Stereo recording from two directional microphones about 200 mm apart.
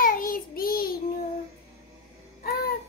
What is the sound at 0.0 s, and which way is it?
Child singing, 45° left (ahead or behind).